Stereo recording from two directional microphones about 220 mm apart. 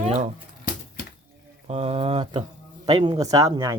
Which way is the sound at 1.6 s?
25° right (ahead or behind).